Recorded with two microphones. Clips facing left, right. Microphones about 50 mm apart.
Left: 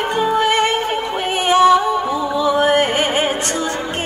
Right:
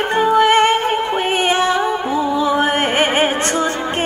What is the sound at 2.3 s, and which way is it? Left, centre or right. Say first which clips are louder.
Music: left 4 dB; right.